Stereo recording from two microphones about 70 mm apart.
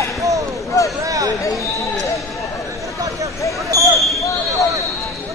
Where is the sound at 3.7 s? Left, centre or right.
Right.